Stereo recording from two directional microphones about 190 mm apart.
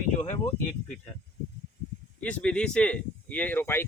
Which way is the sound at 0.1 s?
35° left (ahead or behind).